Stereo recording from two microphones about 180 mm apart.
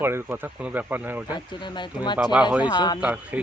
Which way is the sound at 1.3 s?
25° left (ahead or behind).